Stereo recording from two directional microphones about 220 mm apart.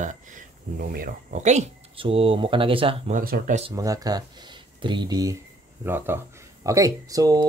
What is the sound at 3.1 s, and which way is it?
Speech, 40° right (ahead or behind).